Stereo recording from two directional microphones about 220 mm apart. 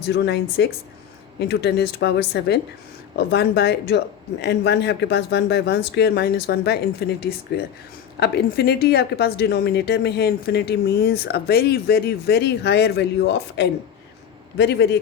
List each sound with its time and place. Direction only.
0.2 s a woman's voice: 50° left (ahead or behind)